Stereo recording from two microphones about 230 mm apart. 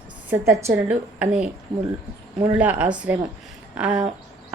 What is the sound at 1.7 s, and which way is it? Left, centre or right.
Speech, right.